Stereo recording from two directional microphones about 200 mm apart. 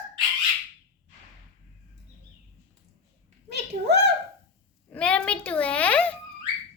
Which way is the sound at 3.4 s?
55° right (ahead or behind).